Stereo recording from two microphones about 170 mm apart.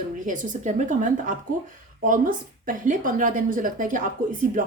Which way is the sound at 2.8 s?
55° right (ahead or behind).